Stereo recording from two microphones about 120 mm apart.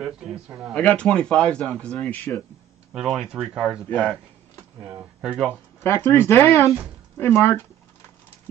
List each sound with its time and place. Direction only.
0.0 s speech: 5° right (ahead or behind)
0.7 s speech: 10° left (ahead or behind)
2.9 s speech: 5° right (ahead or behind)
5.2 s speech: 10° right (ahead or behind)
5.9 s speech: 20° left (ahead or behind)